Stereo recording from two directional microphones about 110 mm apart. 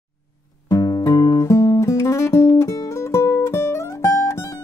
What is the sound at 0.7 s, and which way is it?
Music, 30° left (ahead or behind).